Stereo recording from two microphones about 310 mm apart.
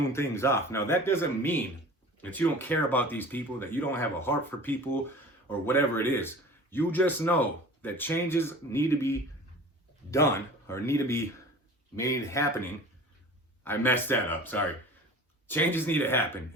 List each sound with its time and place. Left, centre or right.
0.0 s speech: centre